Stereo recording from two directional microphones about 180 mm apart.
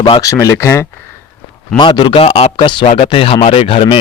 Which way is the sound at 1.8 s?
25° left (ahead or behind).